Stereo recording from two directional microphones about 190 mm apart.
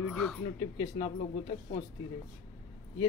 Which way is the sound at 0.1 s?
Centre (ahead or behind).